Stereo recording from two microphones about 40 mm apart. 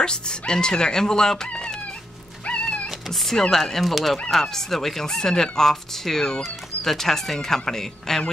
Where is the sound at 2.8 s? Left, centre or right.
Centre.